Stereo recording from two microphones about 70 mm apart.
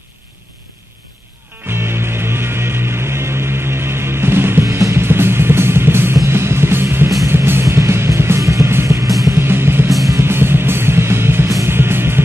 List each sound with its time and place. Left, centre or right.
1.7 s music: right
4.6 s music: right
5.0 s music: right
9.5 s music: right
9.8 s music: centre
10.1 s music: right